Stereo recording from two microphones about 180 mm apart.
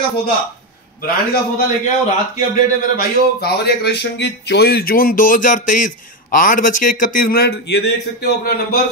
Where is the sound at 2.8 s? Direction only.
60° left (ahead or behind).